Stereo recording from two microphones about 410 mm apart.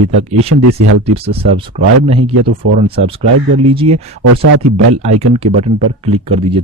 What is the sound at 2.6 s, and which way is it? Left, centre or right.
Speech, right.